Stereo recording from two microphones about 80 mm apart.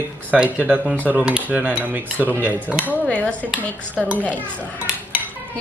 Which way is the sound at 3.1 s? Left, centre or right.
Centre.